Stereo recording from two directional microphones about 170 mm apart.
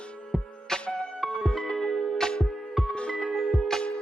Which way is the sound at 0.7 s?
Centre (ahead or behind).